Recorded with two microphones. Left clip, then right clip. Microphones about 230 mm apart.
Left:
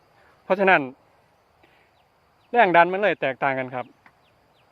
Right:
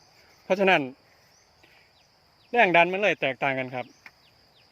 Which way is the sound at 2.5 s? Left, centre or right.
Centre.